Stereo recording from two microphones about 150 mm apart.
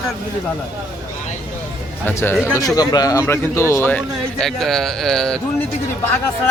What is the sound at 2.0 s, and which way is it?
Speech, 15° left (ahead or behind).